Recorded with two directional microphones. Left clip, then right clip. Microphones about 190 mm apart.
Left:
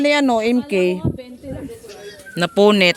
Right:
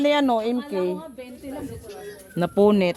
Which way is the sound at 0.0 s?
15° left (ahead or behind).